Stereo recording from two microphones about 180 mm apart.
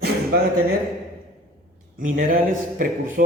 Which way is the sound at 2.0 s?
50° right (ahead or behind).